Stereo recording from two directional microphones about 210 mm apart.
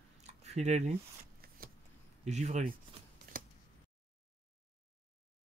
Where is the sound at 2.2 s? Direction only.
30° right (ahead or behind).